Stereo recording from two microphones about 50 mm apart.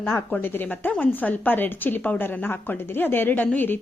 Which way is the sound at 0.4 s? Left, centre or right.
Left.